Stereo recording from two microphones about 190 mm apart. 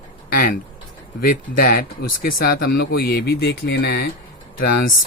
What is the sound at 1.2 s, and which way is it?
Speech, 50° left (ahead or behind).